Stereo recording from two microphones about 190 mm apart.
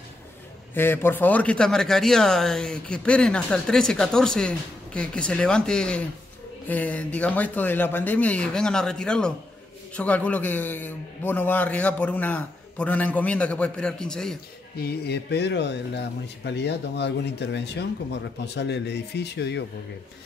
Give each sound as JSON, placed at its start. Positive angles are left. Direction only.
{"t": 0.7, "sound": "a man's voice", "side_deg": 10}
{"t": 14.8, "sound": "speech", "side_deg": 60}